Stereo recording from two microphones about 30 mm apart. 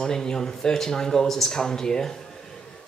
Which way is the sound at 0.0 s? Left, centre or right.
Left.